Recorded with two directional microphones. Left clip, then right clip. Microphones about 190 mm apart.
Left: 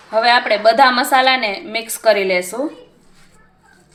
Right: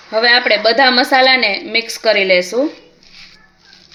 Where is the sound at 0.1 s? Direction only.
50° right (ahead or behind).